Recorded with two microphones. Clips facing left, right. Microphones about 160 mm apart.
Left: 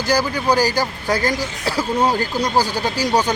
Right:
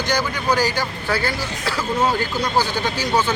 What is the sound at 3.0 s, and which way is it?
Speech, 40° left (ahead or behind).